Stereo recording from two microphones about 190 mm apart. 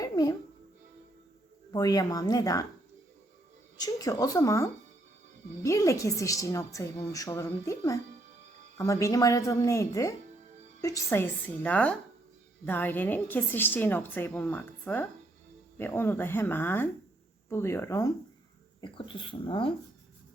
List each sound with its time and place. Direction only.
0.0 s music: 20° left (ahead or behind)
1.7 s speech: 20° left (ahead or behind)
3.8 s a woman's voice: 20° left (ahead or behind)